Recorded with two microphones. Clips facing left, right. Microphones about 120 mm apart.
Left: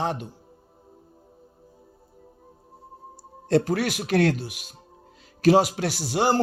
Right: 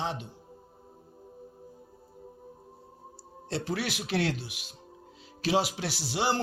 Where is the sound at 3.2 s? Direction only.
45° left (ahead or behind).